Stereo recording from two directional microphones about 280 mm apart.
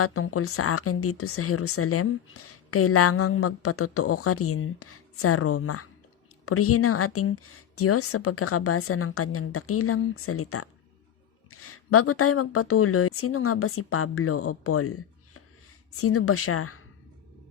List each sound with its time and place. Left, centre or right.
0.0 s speech: left